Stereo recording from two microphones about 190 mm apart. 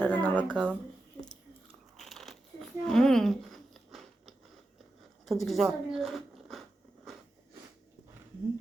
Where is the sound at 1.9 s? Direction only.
Centre (ahead or behind).